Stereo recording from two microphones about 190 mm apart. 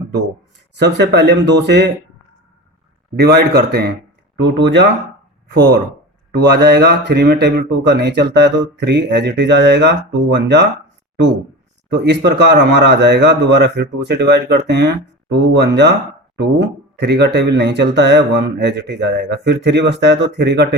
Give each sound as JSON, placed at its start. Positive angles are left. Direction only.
{"t": 0.8, "sound": "speech", "side_deg": -65}
{"t": 3.2, "sound": "speech", "side_deg": -60}
{"t": 6.3, "sound": "speech", "side_deg": -60}
{"t": 11.9, "sound": "speech", "side_deg": -65}